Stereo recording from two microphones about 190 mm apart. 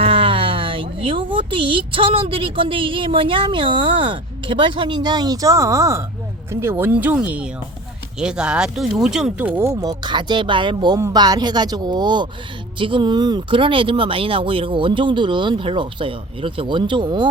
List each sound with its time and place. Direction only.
0.0 s speech: 30° right (ahead or behind)